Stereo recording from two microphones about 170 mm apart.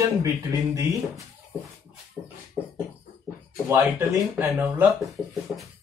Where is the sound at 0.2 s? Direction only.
20° right (ahead or behind).